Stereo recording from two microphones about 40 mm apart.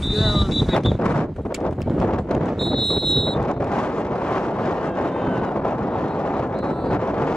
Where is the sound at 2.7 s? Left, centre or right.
Centre.